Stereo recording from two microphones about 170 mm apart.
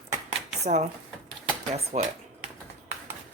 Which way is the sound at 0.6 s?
40° right (ahead or behind).